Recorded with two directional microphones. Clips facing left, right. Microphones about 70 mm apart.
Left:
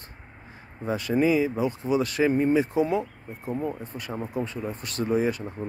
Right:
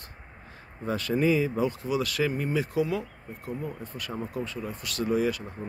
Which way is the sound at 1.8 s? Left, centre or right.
Left.